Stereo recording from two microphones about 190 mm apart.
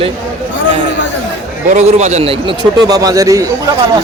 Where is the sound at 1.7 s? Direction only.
35° right (ahead or behind); by 3.4 s 15° right (ahead or behind).